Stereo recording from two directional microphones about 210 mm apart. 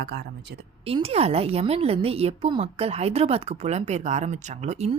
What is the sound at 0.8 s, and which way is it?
A woman's voice, 30° right (ahead or behind).